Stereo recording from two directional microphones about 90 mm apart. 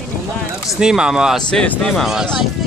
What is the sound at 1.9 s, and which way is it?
Speech, 5° right (ahead or behind).